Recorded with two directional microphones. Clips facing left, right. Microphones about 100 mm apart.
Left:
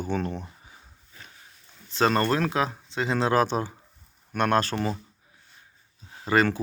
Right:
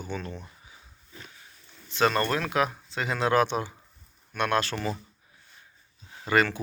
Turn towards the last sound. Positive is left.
turn(degrees=30)  # may be behind; listen again after turning